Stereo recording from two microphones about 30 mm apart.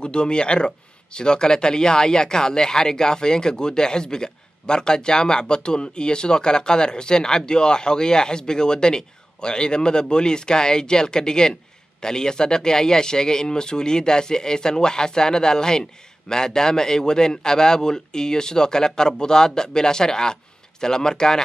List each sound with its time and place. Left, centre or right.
0.0 s speech: left